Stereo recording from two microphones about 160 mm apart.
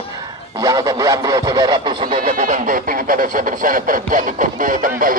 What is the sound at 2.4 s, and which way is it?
Speech, 55° right (ahead or behind).